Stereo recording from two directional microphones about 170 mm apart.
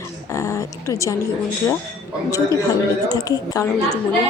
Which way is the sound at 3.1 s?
20° left (ahead or behind).